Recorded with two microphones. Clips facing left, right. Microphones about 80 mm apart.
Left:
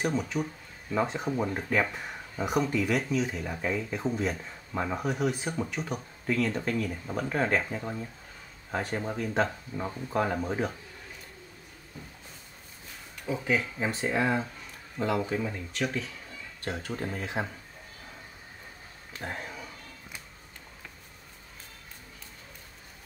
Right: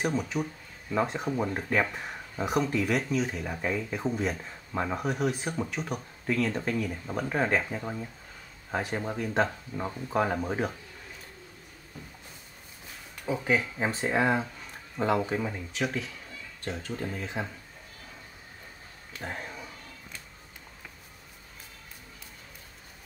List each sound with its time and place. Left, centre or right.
0.0 s speech: centre
13.3 s speech: centre
13.7 s speech: right
14.0 s speech: centre
15.7 s speech: centre
16.9 s speech: centre
17.2 s speech: centre
19.2 s a sound: centre